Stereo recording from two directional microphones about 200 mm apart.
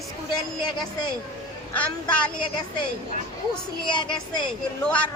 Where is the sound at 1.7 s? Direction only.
5° left (ahead or behind).